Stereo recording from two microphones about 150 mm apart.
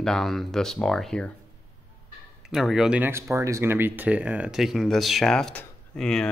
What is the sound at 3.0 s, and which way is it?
Speech, 15° right (ahead or behind).